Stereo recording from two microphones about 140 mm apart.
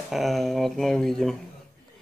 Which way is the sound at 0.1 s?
Centre (ahead or behind).